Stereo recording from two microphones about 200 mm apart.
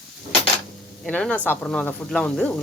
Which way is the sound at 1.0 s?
5° left (ahead or behind).